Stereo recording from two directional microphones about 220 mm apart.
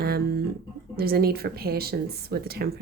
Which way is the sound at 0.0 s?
45° right (ahead or behind).